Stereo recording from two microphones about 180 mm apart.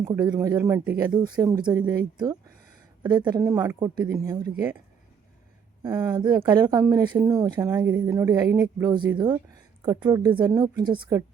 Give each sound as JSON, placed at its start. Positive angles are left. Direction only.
{"t": 0.1, "sound": "a woman's voice", "side_deg": -20}
{"t": 3.0, "sound": "a woman's voice", "side_deg": -25}
{"t": 5.8, "sound": "a woman's voice", "side_deg": -20}